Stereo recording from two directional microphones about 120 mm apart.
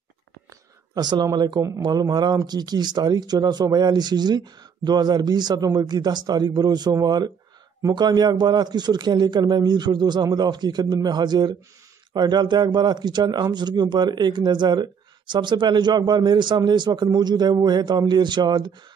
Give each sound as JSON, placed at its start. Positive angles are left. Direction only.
{"t": 0.9, "sound": "a man's voice", "side_deg": -35}